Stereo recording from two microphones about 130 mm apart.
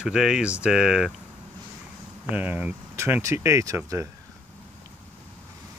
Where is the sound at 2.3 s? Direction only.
10° right (ahead or behind).